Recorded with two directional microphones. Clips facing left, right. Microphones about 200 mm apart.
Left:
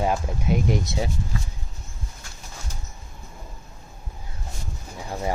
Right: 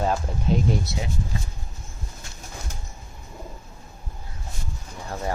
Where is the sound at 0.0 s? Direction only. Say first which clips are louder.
Even; 10° left (ahead or behind).